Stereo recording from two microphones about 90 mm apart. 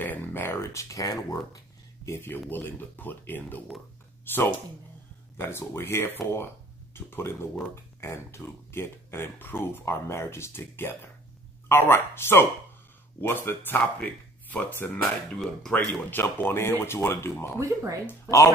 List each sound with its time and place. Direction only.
0.0 s a sound: 20° left (ahead or behind); by 1.6 s 40° left (ahead or behind)
2.0 s speech: 25° left (ahead or behind)
15.3 s speech: 5° left (ahead or behind)
15.7 s speech: 15° left (ahead or behind)
17.6 s speech: 35° right (ahead or behind)